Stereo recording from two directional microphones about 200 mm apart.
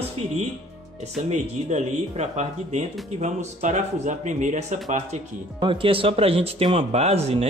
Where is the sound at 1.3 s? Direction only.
35° right (ahead or behind).